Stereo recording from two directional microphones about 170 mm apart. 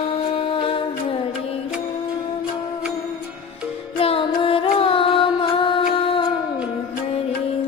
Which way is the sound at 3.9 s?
35° left (ahead or behind).